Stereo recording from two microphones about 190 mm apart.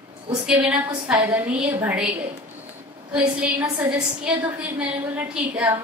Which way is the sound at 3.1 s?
5° right (ahead or behind).